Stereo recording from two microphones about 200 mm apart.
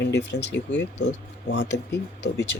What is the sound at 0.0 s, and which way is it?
Speech, 60° left (ahead or behind).